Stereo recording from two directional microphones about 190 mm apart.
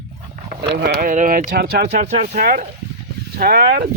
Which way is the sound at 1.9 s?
40° right (ahead or behind).